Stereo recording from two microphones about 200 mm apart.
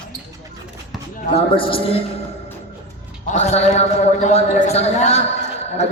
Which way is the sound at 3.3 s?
35° left (ahead or behind).